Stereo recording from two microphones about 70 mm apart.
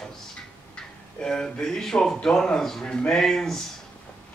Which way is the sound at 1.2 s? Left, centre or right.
Centre.